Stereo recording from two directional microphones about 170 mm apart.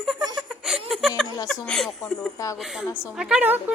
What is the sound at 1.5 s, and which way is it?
A woman's voice, 5° left (ahead or behind).